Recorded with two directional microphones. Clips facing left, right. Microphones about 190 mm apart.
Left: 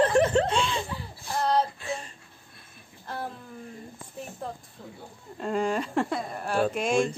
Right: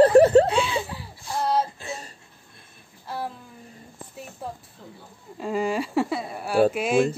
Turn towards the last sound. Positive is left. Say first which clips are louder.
# right 4 dB
turn(degrees=-5)  # may be behind; listen again after turning